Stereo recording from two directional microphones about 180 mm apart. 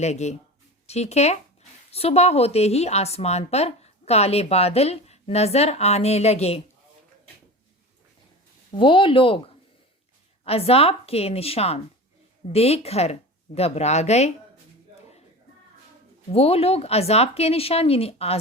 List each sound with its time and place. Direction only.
0.0 s a woman's voice: 40° left (ahead or behind)
8.7 s speech: 25° left (ahead or behind)
10.4 s a woman's voice: 35° left (ahead or behind)
16.3 s a woman's voice: 35° left (ahead or behind)